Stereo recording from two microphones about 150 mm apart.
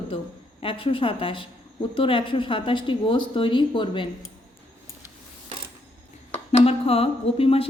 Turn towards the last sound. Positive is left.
turn(degrees=40)  # may be behind; listen again after turning